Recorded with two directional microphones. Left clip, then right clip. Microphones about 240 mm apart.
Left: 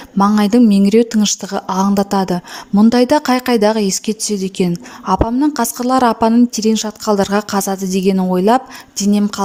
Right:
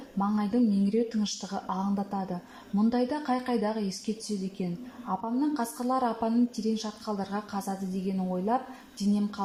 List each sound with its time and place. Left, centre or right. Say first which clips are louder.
0.2 s a woman's voice: left 16 dB; left